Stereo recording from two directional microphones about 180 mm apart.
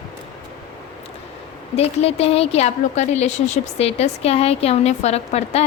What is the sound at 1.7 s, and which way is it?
A woman's voice, 35° left (ahead or behind).